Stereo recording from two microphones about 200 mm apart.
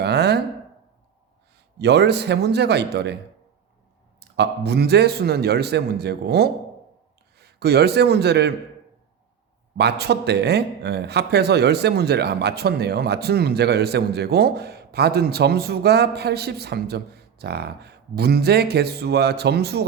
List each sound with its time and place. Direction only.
0.0 s a sound: 55° right (ahead or behind)
1.8 s a man's voice: 55° right (ahead or behind)
4.2 s a man's voice: 55° right (ahead or behind)
9.7 s speech: 55° right (ahead or behind)